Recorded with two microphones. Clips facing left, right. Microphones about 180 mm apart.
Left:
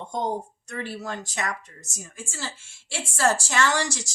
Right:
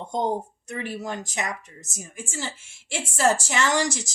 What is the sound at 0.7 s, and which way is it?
A woman's voice, 15° right (ahead or behind).